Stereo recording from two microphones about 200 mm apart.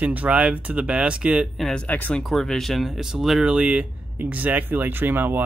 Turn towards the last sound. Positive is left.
turn(degrees=-10)  # may be behind; listen again after turning